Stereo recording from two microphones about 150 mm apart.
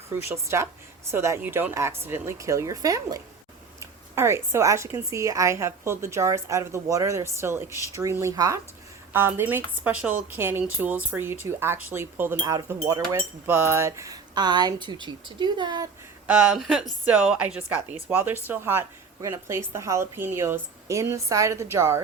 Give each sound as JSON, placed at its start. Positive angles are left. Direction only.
{"t": 0.1, "sound": "a woman's voice", "side_deg": -15}
{"t": 16.2, "sound": "a woman's voice", "side_deg": -5}